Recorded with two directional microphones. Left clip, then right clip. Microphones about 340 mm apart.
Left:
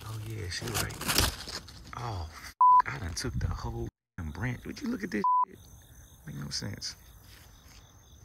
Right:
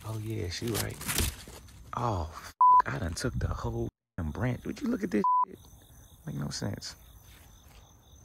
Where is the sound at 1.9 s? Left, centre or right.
Centre.